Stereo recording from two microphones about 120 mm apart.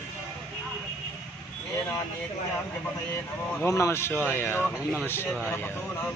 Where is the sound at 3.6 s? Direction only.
25° left (ahead or behind).